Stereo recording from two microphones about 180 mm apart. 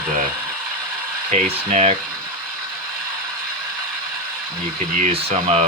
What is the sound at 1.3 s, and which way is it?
Speech, 35° right (ahead or behind).